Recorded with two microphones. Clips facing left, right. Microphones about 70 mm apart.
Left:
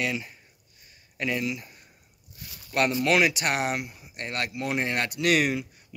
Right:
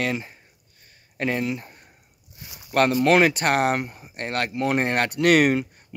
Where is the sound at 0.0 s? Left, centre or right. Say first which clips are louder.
Right 3 dB; right.